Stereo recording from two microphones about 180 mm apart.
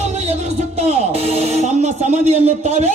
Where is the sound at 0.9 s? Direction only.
35° right (ahead or behind).